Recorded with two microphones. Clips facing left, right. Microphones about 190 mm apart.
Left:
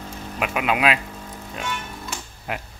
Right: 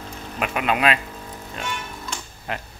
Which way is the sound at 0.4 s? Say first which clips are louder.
Even; 5° left (ahead or behind).